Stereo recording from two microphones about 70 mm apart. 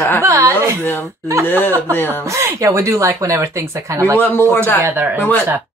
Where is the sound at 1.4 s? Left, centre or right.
Left.